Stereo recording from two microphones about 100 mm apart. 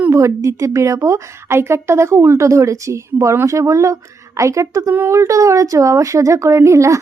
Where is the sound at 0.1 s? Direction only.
30° right (ahead or behind).